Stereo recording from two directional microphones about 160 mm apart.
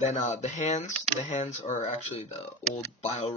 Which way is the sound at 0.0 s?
50° left (ahead or behind).